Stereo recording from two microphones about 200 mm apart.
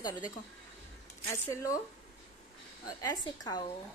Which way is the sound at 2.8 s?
20° left (ahead or behind).